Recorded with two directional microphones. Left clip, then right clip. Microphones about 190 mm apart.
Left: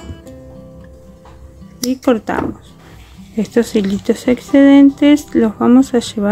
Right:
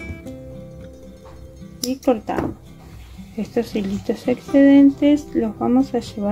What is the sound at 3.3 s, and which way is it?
Speech, 35° left (ahead or behind).